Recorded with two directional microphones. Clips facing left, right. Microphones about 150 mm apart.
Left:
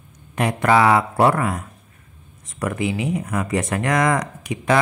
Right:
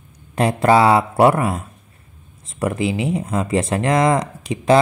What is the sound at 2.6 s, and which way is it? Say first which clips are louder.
Speech: right 3 dB; 25° right (ahead or behind).